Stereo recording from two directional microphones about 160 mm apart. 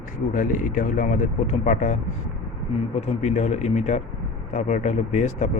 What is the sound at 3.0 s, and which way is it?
Speech, 45° left (ahead or behind).